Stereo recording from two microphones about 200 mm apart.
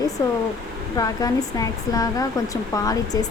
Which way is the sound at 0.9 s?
20° left (ahead or behind).